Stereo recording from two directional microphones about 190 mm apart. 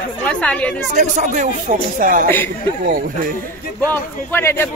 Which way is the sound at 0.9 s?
40° right (ahead or behind).